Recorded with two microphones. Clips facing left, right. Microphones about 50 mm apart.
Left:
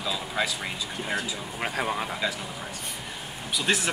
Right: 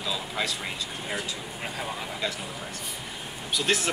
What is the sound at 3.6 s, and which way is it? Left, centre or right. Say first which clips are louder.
Speech: even; centre.